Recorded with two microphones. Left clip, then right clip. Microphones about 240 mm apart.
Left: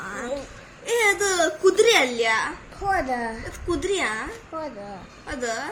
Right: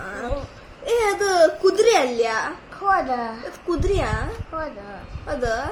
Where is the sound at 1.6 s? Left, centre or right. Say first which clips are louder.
Right 1 dB; left.